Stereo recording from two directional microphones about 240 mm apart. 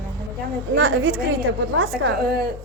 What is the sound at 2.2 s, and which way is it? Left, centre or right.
Speech, right.